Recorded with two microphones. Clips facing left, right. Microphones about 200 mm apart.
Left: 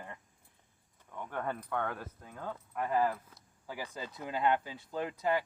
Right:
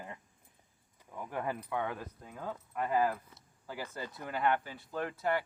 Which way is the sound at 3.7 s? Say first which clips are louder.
Even; 15° left (ahead or behind).